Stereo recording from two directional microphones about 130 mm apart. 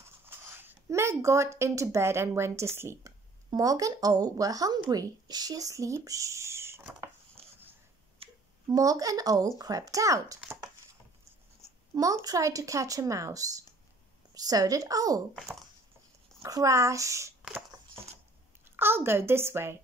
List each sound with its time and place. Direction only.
0.4 s speech: 15° right (ahead or behind)
8.2 s a sound: 50° right (ahead or behind)
8.6 s speech: 25° right (ahead or behind)
11.9 s speech: 25° right (ahead or behind)
16.4 s speech: 25° right (ahead or behind)
17.4 s a sound: 5° right (ahead or behind)
18.8 s speech: 20° right (ahead or behind)